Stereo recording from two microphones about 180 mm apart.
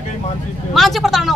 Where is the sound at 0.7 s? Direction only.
Centre (ahead or behind).